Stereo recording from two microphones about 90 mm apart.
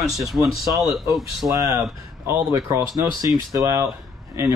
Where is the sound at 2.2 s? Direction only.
30° right (ahead or behind).